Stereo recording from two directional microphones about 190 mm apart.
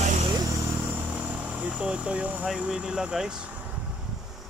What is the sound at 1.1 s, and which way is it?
Speech, 5° right (ahead or behind).